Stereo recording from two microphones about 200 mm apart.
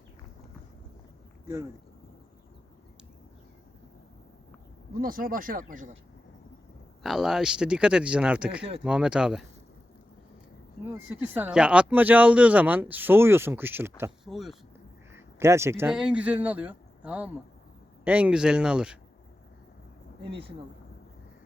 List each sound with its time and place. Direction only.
4.9 s speech: 45° right (ahead or behind)
7.0 s speech: centre (ahead or behind)
10.8 s speech: 10° right (ahead or behind)
15.1 s speech: 15° right (ahead or behind)